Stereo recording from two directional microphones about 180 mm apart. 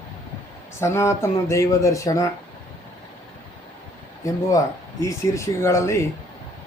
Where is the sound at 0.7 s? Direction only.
15° left (ahead or behind).